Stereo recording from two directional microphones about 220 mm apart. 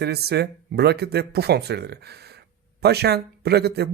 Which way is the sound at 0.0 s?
45° right (ahead or behind).